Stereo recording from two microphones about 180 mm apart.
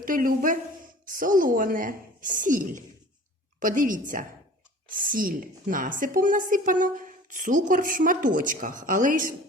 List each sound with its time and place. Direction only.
0.0 s a woman's voice: 50° right (ahead or behind)